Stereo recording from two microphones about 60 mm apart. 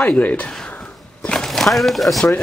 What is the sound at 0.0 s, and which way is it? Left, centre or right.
Mantra, left.